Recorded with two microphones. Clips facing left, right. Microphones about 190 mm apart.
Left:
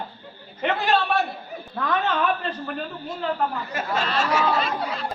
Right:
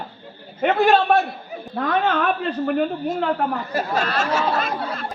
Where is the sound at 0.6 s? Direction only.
50° right (ahead or behind).